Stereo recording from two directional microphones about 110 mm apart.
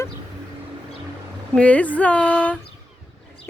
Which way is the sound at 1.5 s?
15° left (ahead or behind).